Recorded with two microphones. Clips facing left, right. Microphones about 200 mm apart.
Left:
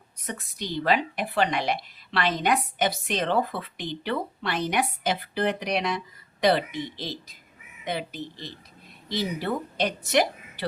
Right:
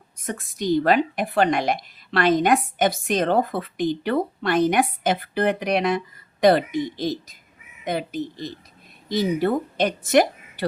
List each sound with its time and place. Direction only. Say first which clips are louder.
0.3 s a woman's voice: right 10 dB; 50° right (ahead or behind)